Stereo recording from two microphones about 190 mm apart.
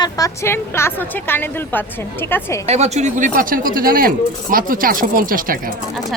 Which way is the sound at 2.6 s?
35° right (ahead or behind).